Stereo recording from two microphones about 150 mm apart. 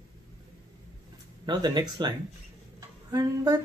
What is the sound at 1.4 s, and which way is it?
Speech, 30° right (ahead or behind).